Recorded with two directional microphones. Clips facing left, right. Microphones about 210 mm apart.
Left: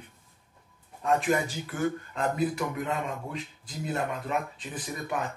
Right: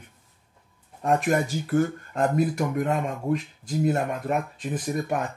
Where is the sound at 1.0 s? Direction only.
50° right (ahead or behind).